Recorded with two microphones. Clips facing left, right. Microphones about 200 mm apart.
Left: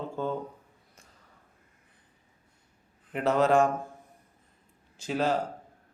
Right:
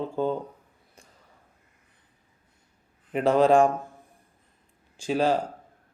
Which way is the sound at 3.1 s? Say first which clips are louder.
Right 4 dB; 15° right (ahead or behind).